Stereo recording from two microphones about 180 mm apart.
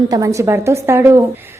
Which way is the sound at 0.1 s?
15° right (ahead or behind).